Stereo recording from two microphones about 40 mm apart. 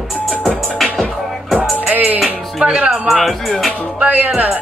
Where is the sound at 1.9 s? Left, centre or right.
Right.